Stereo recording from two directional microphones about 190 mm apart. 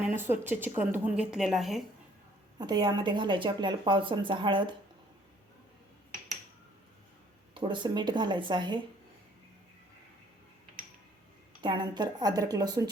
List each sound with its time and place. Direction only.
0.0 s speech: 10° right (ahead or behind)
2.6 s a woman's voice: 20° right (ahead or behind)
7.5 s a woman's voice: 25° right (ahead or behind)
11.6 s a woman's voice: 25° right (ahead or behind)